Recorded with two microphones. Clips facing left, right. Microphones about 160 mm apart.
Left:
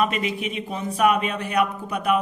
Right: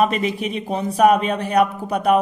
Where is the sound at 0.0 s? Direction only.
35° right (ahead or behind).